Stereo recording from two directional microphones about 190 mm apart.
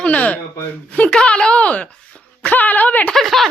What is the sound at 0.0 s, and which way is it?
A woman's voice, 5° left (ahead or behind).